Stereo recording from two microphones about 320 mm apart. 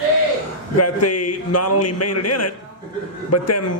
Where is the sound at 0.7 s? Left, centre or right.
Left.